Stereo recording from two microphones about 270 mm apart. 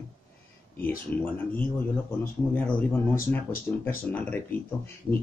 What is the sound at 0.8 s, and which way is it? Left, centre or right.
A man's voice, centre.